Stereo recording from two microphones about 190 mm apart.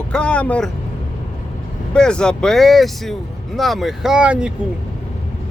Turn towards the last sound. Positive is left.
turn(degrees=-5)  # may be behind; listen again after turning